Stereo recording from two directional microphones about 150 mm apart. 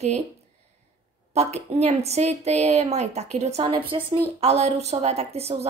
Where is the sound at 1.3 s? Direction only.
45° right (ahead or behind).